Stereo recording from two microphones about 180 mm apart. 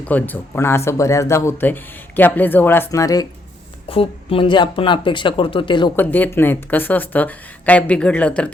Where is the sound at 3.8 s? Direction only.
30° left (ahead or behind).